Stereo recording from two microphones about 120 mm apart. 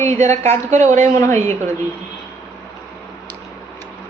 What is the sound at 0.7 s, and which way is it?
Speech, 90° right.